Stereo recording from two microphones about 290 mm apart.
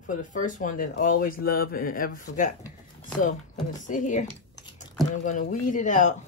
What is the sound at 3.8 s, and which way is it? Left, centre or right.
Speech, left.